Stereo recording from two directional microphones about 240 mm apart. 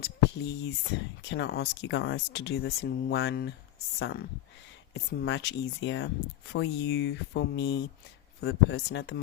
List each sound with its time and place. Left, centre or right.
0.0 s speech: left